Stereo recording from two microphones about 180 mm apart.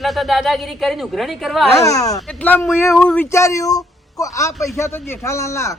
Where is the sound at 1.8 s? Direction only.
20° left (ahead or behind).